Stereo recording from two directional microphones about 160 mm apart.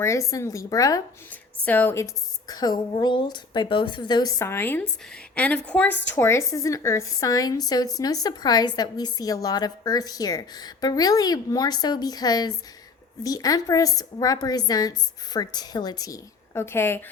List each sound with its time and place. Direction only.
0.0 s a woman's voice: 20° left (ahead or behind)
1.6 s a woman's voice: 10° left (ahead or behind)
2.5 s a woman's voice: 25° left (ahead or behind)